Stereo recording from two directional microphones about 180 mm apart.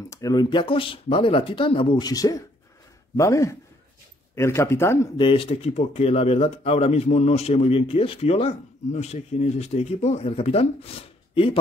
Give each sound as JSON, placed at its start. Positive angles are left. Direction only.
{"t": 0.1, "sound": "speech", "side_deg": 20}
{"t": 5.1, "sound": "speech", "side_deg": 30}